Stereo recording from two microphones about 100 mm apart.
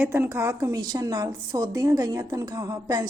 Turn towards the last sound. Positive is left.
turn(degrees=-40)  # may be behind; listen again after turning